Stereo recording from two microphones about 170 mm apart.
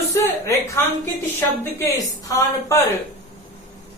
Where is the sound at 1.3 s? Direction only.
15° left (ahead or behind).